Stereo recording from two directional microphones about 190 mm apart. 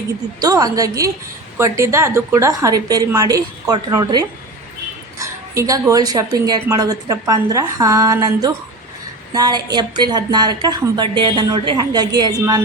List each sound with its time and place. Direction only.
0.3 s a woman's voice: 20° right (ahead or behind)